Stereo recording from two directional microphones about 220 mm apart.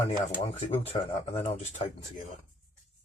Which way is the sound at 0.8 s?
30° left (ahead or behind).